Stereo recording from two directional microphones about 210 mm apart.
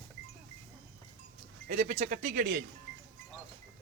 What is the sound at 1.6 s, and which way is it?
Speech, 35° right (ahead or behind).